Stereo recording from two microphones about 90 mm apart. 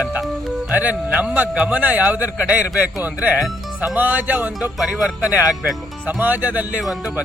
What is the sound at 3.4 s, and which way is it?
Speech, 5° right (ahead or behind).